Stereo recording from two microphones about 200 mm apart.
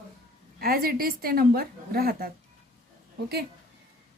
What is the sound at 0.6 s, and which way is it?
A woman's voice, 50° right (ahead or behind).